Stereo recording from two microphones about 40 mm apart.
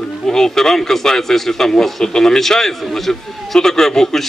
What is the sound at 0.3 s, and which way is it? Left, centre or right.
A man's voice, centre.